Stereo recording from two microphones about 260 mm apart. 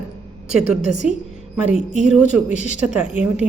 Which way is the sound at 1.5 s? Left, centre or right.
Centre.